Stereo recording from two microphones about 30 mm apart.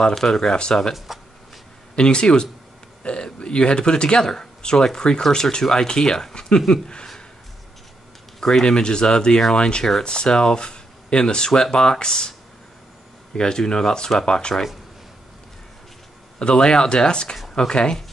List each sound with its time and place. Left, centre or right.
0.1 s speech: centre
0.9 s speech: centre
2.0 s speech: left
4.2 s speech: centre
8.4 s speech: centre
16.3 s speech: left